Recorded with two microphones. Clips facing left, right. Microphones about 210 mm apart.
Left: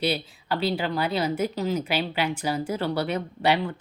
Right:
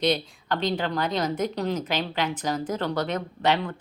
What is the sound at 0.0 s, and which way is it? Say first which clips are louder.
A woman's voice: right 2 dB; 5° left (ahead or behind).